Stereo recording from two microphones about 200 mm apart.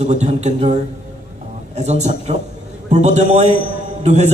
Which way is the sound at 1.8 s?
35° right (ahead or behind).